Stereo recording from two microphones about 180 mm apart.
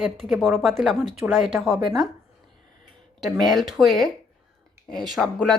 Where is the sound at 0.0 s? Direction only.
Centre (ahead or behind).